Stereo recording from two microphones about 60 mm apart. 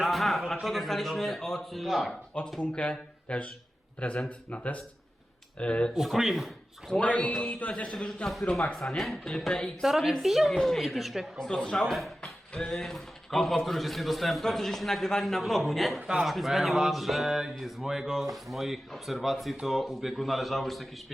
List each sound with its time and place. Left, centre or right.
0.0 s a man's voice: centre
2.3 s a man's voice: centre
5.9 s a man's voice: centre
7.0 s a man's voice: left
9.8 s a man's voice: centre
11.3 s a man's voice: centre